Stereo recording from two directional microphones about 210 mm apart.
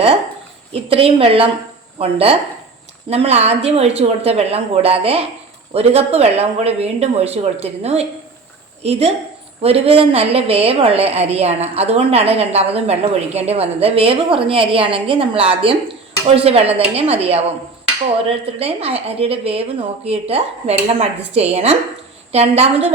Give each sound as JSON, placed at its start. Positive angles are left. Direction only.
{"t": 0.7, "sound": "a woman's voice", "side_deg": -25}